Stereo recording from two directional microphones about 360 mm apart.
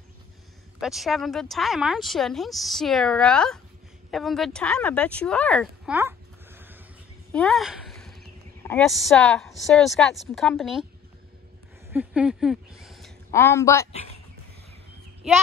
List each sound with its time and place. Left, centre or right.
0.7 s speech: centre
11.9 s a woman's voice: centre